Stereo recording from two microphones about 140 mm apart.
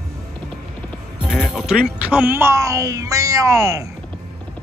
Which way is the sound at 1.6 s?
5° right (ahead or behind).